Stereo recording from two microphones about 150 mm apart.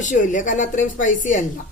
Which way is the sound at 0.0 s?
55° left (ahead or behind).